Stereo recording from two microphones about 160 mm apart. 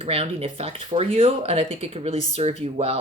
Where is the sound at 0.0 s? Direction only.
40° right (ahead or behind).